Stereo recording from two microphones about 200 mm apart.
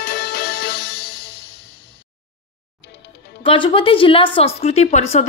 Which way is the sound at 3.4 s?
25° left (ahead or behind).